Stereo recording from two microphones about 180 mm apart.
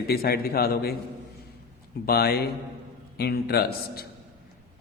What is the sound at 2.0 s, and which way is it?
A man's voice, 60° left (ahead or behind).